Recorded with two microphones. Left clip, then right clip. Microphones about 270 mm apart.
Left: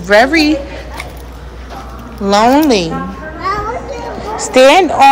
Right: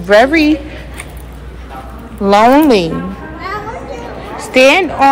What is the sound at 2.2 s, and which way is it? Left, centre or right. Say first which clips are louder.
Speech: right 2 dB; centre.